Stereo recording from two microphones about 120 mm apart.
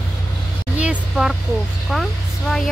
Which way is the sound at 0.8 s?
10° right (ahead or behind).